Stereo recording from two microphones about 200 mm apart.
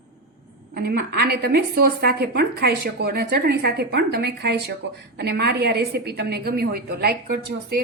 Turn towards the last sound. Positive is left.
turn(degrees=-50)  # may be behind; listen again after turning